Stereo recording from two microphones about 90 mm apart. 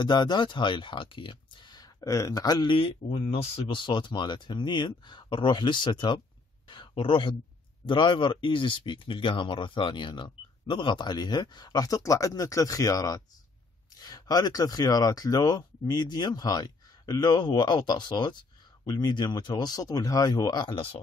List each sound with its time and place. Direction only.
0.0 s speech: 55° left (ahead or behind)
2.7 s speech: 90° left; by 6.2 s 60° left (ahead or behind)
6.7 s speech: 70° left (ahead or behind)
7.8 s speech: 60° left (ahead or behind)
20.7 s speech: 85° left